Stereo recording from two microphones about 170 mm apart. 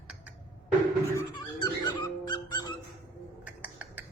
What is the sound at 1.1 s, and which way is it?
Squeak, 25° left (ahead or behind).